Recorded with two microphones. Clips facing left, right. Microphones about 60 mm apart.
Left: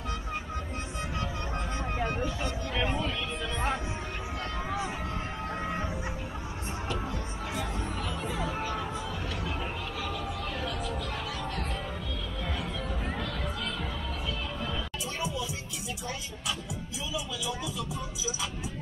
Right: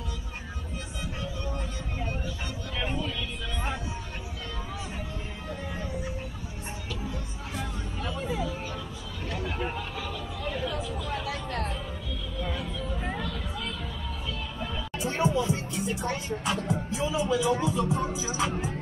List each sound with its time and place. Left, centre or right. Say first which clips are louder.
10.6 s a sound: right 1 dB; centre
13.0 s music: right 3 dB; centre
15.0 s music: right 11 dB; right
16.6 s speech: right 9 dB; right